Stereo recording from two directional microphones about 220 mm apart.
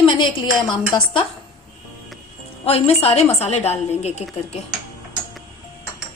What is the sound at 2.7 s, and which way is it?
A woman's voice, 25° left (ahead or behind).